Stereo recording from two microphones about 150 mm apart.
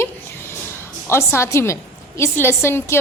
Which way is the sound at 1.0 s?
15° left (ahead or behind).